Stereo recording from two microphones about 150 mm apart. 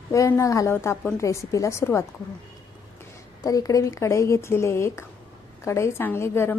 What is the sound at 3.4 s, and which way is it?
A woman's voice, 25° left (ahead or behind).